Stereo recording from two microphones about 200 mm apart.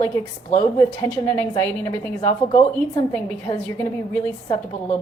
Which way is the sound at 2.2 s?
35° left (ahead or behind).